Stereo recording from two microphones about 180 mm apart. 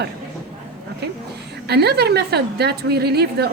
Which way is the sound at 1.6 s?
65° right (ahead or behind).